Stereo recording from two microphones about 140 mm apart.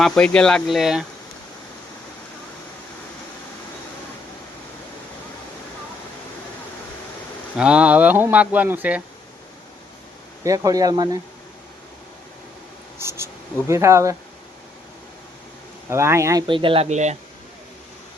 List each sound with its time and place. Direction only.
0.0 s speech: 5° left (ahead or behind)
7.5 s speech: 10° right (ahead or behind)
10.4 s speech: 25° right (ahead or behind)
13.0 s speech: 20° right (ahead or behind)
15.9 s speech: 20° right (ahead or behind)
16.5 s speech: 40° right (ahead or behind); by 17.2 s 55° right (ahead or behind)